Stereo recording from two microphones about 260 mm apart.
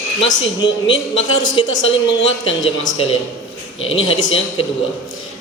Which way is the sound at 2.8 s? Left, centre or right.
Left.